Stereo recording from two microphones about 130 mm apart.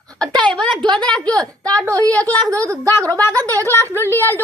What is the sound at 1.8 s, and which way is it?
A woman's voice, 25° right (ahead or behind).